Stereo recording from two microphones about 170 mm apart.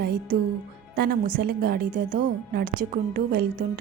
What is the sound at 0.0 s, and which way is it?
Music, 70° right (ahead or behind).